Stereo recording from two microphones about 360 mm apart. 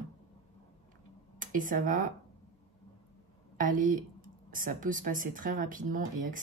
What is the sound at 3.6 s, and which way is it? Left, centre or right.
Speech, right.